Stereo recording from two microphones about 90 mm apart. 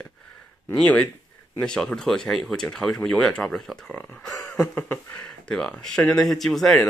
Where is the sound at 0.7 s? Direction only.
15° left (ahead or behind).